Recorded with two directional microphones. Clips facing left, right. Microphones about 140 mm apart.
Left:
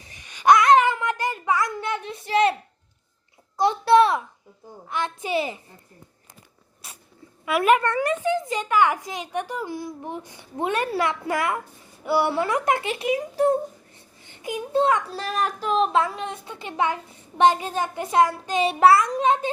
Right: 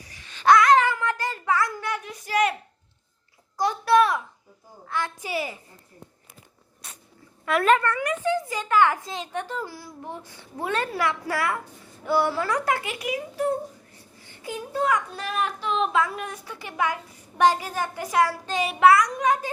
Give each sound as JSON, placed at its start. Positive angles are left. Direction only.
{"t": 0.0, "sound": "a sound", "side_deg": 20}
{"t": 3.6, "sound": "a sound", "side_deg": 25}
{"t": 4.9, "sound": "a child's voice", "side_deg": 20}
{"t": 6.8, "sound": "dog", "side_deg": 5}
{"t": 7.4, "sound": "a child's voice", "side_deg": 10}
{"t": 7.9, "sound": "speech", "side_deg": 35}
{"t": 8.2, "sound": "a child's voice", "side_deg": 20}
{"t": 14.2, "sound": "a child's voice", "side_deg": 20}